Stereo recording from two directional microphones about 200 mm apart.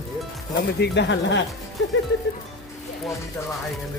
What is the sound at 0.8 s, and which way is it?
Speech, 60° left (ahead or behind).